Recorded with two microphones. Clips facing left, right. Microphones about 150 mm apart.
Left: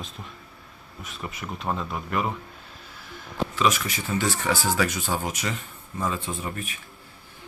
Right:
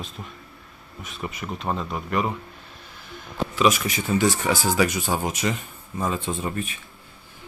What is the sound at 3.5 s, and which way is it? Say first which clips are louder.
Speech: right 4 dB; 15° right (ahead or behind).